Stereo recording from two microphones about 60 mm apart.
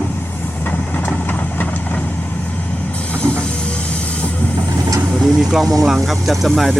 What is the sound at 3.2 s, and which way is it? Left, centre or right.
Vehicle, left.